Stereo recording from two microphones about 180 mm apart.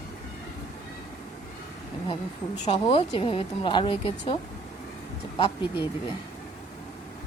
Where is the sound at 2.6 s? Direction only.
30° left (ahead or behind).